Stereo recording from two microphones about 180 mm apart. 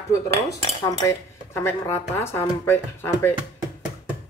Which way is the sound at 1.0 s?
15° left (ahead or behind).